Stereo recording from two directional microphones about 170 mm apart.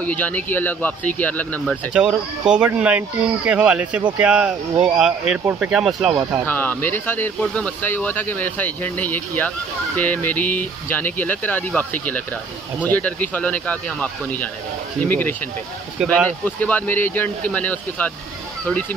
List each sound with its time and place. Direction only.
0.0 s speech: 10° left (ahead or behind)
2.0 s speech: 5° right (ahead or behind)
5.4 s speech: 15° right (ahead or behind)
5.7 s speech: centre (ahead or behind)
6.4 s speech: 10° left (ahead or behind)